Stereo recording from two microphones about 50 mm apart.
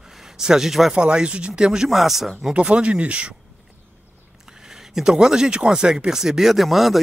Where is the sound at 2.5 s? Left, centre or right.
Right.